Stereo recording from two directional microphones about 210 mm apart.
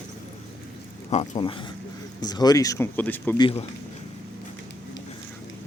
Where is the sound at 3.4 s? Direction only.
30° left (ahead or behind).